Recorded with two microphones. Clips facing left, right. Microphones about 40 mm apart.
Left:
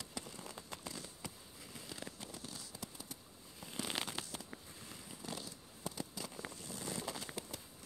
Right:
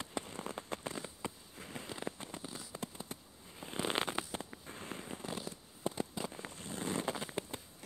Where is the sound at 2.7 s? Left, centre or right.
Right.